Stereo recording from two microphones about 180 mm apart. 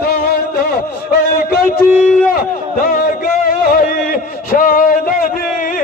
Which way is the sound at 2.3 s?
50° left (ahead or behind).